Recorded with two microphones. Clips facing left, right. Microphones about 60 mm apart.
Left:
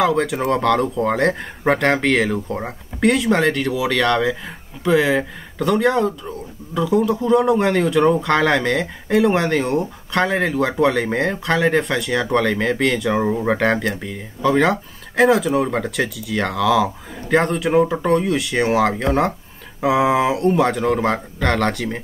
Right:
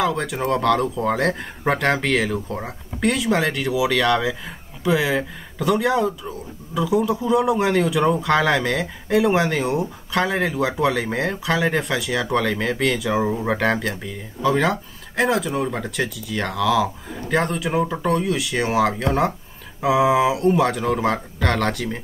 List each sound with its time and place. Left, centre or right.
0.0 s speech: centre